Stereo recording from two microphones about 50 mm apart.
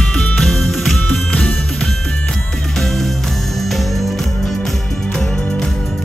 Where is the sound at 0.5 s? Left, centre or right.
Centre.